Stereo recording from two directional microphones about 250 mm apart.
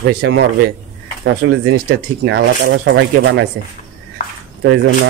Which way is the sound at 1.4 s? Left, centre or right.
Right.